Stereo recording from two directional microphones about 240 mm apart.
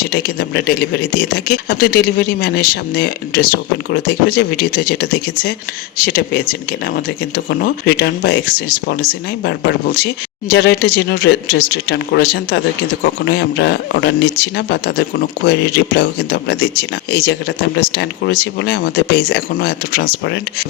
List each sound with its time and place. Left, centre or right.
0.1 s speech: left